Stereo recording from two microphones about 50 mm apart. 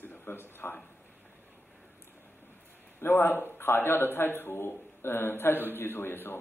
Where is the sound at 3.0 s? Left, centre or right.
Left.